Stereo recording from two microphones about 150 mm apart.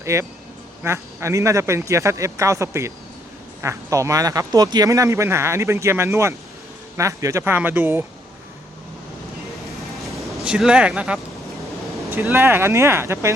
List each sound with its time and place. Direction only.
0.0 s speech: 20° right (ahead or behind)
10.4 s speech: 5° right (ahead or behind)